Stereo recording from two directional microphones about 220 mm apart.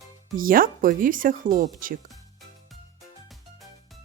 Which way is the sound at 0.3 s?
40° right (ahead or behind).